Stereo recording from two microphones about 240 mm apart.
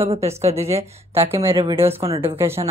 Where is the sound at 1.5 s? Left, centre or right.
Right.